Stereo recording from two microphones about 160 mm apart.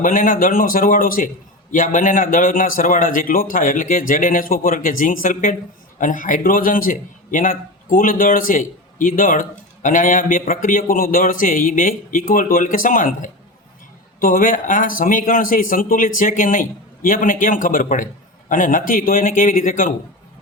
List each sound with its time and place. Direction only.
0.0 s a man's voice: 55° left (ahead or behind)